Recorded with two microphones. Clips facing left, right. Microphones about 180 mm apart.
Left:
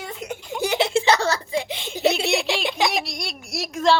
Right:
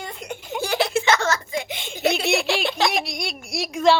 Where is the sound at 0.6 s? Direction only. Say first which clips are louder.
Left 2 dB; 20° left (ahead or behind).